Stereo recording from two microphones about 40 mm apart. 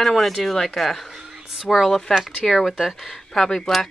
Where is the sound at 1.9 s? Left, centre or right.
Centre.